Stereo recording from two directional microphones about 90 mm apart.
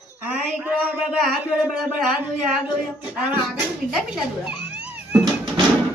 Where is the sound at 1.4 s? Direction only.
15° right (ahead or behind).